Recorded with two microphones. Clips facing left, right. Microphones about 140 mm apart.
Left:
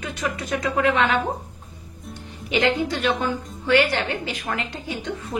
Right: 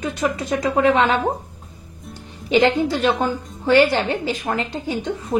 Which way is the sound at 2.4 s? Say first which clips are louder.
Right 5 dB; 30° right (ahead or behind).